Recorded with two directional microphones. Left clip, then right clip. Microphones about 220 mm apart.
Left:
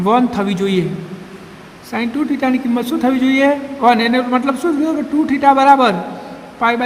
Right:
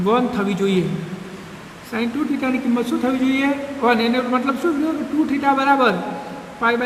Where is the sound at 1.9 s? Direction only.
40° left (ahead or behind).